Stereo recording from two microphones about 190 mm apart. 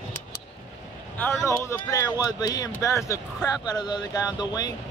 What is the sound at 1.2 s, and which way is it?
Speech, 15° left (ahead or behind).